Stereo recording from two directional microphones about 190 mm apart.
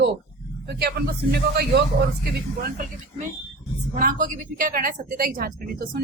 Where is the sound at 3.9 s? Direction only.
45° right (ahead or behind).